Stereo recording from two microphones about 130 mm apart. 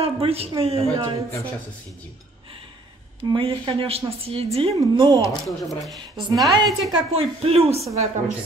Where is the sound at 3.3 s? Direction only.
40° right (ahead or behind).